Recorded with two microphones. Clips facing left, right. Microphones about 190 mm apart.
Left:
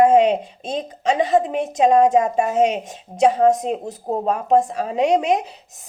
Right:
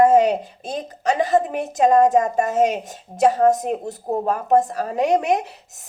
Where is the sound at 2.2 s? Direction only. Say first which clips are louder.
Left 1 dB; 45° right (ahead or behind).